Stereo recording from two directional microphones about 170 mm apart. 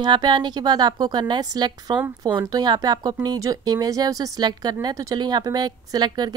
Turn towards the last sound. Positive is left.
turn(degrees=-25)  # may be behind; listen again after turning